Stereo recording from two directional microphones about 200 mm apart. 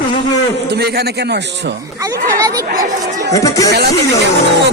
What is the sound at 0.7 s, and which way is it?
A man's voice, 55° right (ahead or behind).